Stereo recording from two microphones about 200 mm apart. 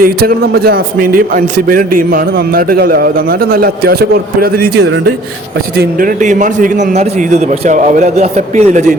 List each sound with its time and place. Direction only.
0.0 s a man's voice: 50° right (ahead or behind)